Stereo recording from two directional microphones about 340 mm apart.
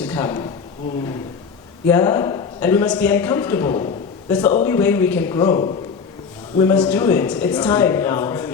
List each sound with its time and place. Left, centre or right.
0.0 s speech: centre
1.9 s a man's voice: centre